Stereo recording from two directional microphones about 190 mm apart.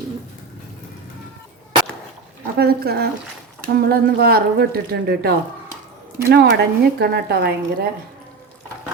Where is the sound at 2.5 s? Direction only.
55° right (ahead or behind).